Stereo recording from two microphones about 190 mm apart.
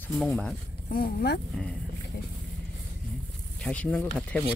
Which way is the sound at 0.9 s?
50° left (ahead or behind).